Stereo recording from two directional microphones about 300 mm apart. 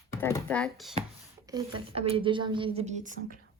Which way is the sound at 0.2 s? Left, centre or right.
Centre.